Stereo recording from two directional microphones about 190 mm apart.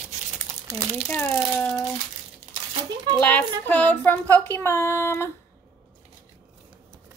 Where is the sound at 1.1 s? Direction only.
10° left (ahead or behind).